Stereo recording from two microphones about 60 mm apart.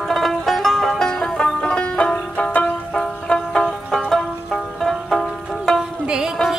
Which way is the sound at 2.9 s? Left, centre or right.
Centre.